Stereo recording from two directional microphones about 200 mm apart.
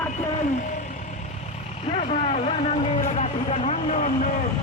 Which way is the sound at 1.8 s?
30° left (ahead or behind).